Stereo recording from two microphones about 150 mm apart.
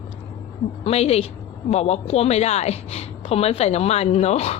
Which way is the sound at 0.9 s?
45° left (ahead or behind).